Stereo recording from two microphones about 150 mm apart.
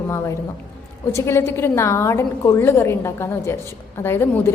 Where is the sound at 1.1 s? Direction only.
20° left (ahead or behind).